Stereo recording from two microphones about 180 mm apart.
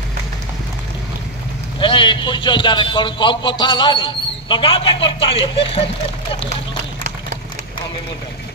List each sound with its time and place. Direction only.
1.8 s a man's voice: 25° left (ahead or behind)